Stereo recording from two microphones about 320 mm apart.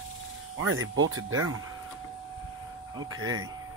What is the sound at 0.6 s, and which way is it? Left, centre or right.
Speech, right.